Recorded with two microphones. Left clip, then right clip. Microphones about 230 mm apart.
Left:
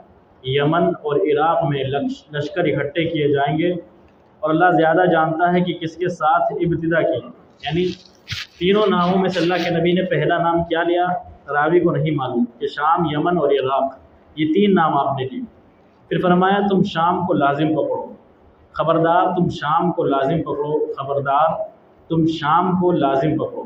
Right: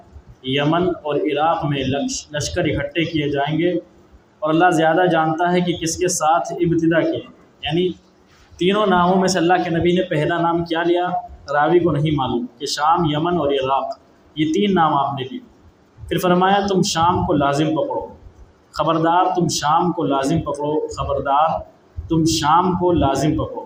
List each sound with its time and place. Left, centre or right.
0.4 s speech: right
8.5 s speech: right
18.8 s speech: right